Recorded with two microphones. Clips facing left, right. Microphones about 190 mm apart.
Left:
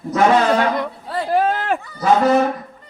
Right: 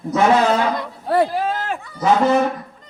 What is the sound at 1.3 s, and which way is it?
Speech, 60° left (ahead or behind).